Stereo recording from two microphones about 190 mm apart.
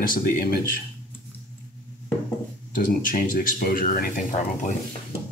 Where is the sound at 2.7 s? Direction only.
45° left (ahead or behind).